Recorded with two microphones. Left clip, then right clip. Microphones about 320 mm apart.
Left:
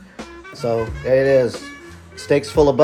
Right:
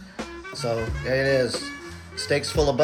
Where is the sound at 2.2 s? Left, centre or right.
Centre.